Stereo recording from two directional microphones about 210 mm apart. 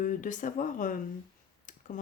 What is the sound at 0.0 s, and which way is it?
Speech, 40° left (ahead or behind).